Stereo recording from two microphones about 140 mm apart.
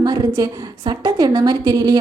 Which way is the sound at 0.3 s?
25° right (ahead or behind).